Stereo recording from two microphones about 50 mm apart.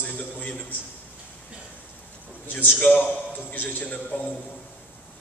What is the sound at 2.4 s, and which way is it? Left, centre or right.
A man's voice, left.